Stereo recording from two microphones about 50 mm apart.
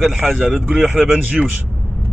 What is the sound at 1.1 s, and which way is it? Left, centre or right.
Speech, right.